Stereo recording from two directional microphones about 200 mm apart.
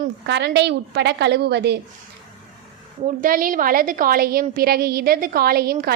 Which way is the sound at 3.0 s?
45° right (ahead or behind).